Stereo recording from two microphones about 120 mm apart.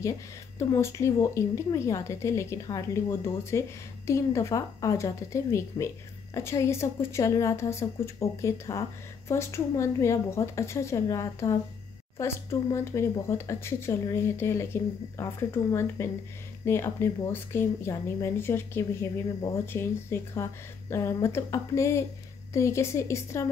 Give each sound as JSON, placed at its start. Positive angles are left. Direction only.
{"t": 0.6, "sound": "speech", "side_deg": 25}